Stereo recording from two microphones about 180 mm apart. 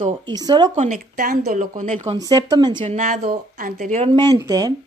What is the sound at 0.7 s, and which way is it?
Speech, 45° right (ahead or behind).